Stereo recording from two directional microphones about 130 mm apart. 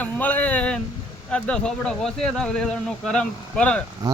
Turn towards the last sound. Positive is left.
turn(degrees=10)  # may be behind; listen again after turning